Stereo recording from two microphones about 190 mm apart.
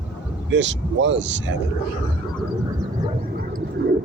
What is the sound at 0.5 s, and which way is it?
Speech, 70° right (ahead or behind).